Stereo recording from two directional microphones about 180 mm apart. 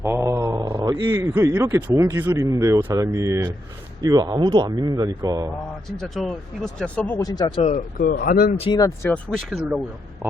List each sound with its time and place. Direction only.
0.0 s speech: 15° right (ahead or behind)
6.0 s speech: centre (ahead or behind)
7.2 s speech: 20° left (ahead or behind)
7.6 s speech: 40° left (ahead or behind)
8.5 s speech: 30° left (ahead or behind)
9.1 s speech: centre (ahead or behind)